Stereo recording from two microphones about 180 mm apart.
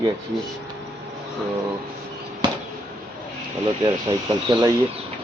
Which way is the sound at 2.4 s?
25° right (ahead or behind).